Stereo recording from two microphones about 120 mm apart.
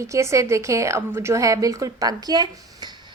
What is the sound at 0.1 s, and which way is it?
A woman's voice, 25° right (ahead or behind).